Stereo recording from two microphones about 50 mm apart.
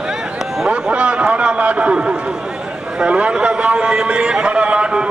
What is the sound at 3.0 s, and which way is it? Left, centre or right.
A man's voice, right.